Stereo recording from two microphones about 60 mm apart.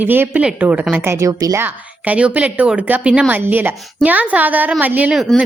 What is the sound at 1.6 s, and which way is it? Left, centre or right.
A woman's voice, right.